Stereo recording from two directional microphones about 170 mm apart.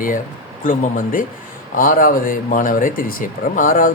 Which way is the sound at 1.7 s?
55° left (ahead or behind).